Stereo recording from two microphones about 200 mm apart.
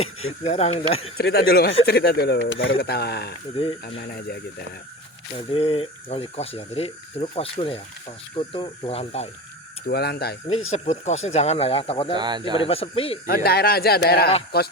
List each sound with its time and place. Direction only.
0.4 s speech: 30° left (ahead or behind)
1.2 s speech: 50° left (ahead or behind); by 2.7 s 70° left (ahead or behind)
2.7 s speech: 55° left (ahead or behind)
5.5 s speech: 25° left (ahead or behind)
9.8 s speech: 55° left (ahead or behind)
10.7 s speech: 35° left (ahead or behind)
12.1 s speech: 20° right (ahead or behind)
12.5 s speech: 30° left (ahead or behind)
13.2 s speech: 50° left (ahead or behind)